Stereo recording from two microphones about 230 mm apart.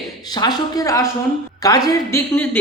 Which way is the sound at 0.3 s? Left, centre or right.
Centre.